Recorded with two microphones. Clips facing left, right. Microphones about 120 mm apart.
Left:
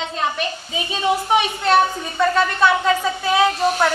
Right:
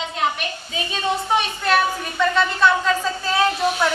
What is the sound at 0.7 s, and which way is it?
A woman's voice, 20° left (ahead or behind).